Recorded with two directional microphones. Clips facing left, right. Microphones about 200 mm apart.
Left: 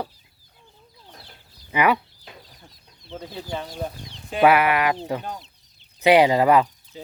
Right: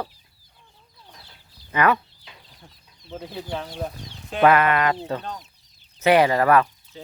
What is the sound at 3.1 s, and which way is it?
Speech, 10° right (ahead or behind).